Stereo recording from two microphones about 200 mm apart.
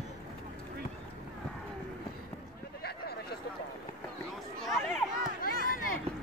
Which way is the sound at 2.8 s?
55° left (ahead or behind).